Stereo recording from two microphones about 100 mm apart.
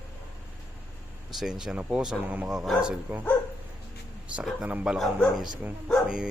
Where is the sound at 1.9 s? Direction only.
15° right (ahead or behind).